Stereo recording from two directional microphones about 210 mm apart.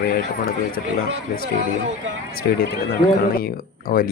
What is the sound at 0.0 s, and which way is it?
Speech, 45° left (ahead or behind).